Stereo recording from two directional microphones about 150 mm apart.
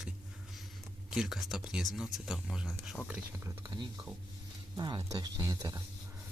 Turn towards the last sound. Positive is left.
turn(degrees=-20)  # may be behind; listen again after turning